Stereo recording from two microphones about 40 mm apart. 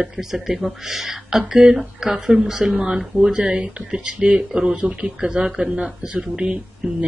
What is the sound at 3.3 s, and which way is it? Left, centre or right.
Speech, right.